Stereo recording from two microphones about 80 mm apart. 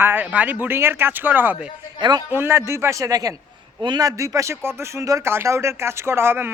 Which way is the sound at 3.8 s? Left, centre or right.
Right.